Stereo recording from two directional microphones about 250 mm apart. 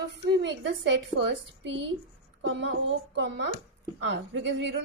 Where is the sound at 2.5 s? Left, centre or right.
Right.